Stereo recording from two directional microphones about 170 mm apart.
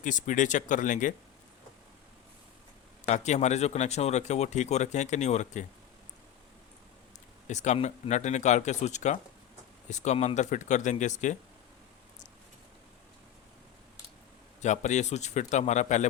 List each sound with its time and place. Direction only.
0.0 s speech: 50° left (ahead or behind)
3.1 s speech: 40° left (ahead or behind)
7.4 s speech: 45° left (ahead or behind)
14.6 s speech: 45° left (ahead or behind)